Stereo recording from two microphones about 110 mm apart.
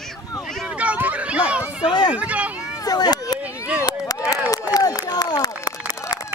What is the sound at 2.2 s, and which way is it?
Speech, 10° right (ahead or behind).